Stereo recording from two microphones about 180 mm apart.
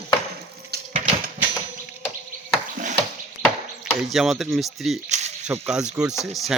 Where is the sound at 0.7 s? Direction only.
60° right (ahead or behind).